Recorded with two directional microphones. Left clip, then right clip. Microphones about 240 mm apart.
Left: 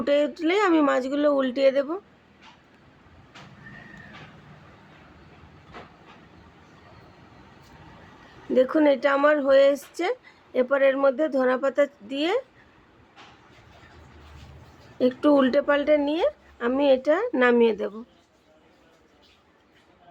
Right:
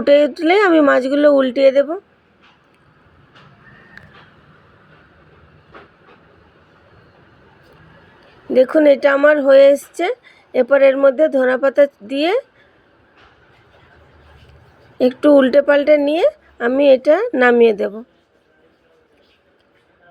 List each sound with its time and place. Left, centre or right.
0.0 s a woman's voice: right
8.5 s a woman's voice: centre
14.9 s a woman's voice: centre